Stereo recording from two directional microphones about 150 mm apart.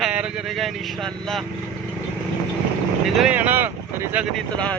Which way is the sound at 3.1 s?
10° right (ahead or behind).